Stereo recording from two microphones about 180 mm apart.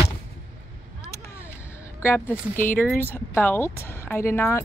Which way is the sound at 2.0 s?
10° left (ahead or behind).